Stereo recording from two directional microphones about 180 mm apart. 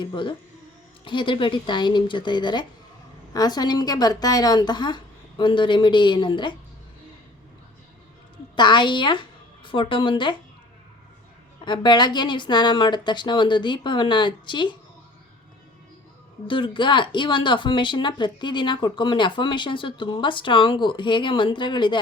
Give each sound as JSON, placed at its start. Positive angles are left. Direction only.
{"t": 0.0, "sound": "speech", "side_deg": 25}
{"t": 8.5, "sound": "speech", "side_deg": 25}
{"t": 11.6, "sound": "speech", "side_deg": 25}
{"t": 16.5, "sound": "speech", "side_deg": 30}